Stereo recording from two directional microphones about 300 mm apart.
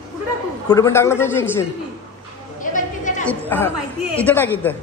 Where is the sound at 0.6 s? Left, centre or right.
Centre.